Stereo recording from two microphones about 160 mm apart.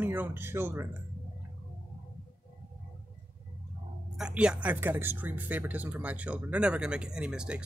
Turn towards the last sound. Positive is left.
turn(degrees=-5)  # may be behind; listen again after turning